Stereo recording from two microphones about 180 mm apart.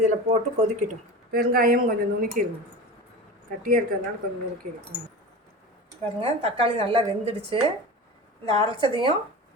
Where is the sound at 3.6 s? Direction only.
50° right (ahead or behind).